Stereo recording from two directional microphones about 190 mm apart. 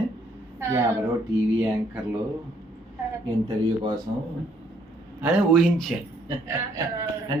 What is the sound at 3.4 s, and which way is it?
Speech, 20° right (ahead or behind).